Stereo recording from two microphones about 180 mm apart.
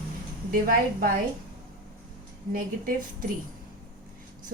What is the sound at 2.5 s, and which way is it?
Speech, 50° right (ahead or behind).